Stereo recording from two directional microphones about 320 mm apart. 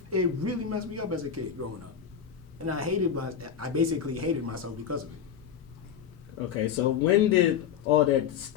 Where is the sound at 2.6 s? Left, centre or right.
Right.